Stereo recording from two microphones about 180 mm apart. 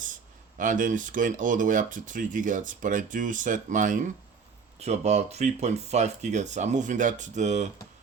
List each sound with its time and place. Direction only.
0.5 s speech: 45° right (ahead or behind)